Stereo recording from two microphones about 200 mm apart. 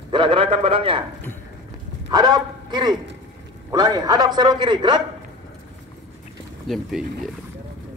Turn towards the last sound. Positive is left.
turn(degrees=0)  # may be behind; listen again after turning